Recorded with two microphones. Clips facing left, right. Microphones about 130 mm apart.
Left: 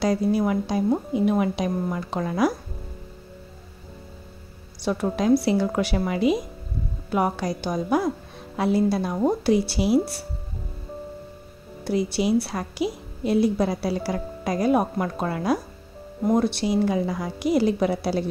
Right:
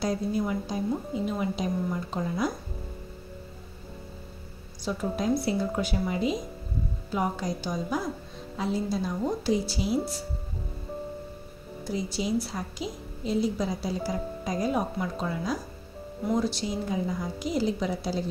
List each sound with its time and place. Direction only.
0.0 s a woman's voice: 85° left
4.8 s a woman's voice: 80° left
11.8 s a woman's voice: 70° left (ahead or behind)